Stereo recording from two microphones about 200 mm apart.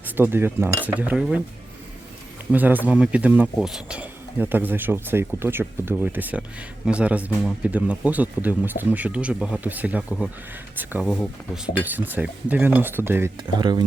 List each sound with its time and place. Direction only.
0.0 s cutlery: 10° right (ahead or behind)
0.9 s speech: 10° right (ahead or behind)
2.5 s speech: 10° right (ahead or behind)
13.6 s speech: 20° right (ahead or behind)